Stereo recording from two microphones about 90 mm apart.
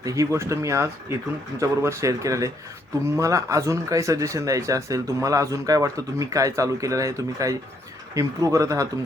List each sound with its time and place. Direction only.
0.0 s speech: 40° right (ahead or behind)